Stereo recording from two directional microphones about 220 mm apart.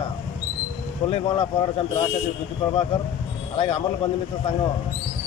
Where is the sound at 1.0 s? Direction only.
25° left (ahead or behind).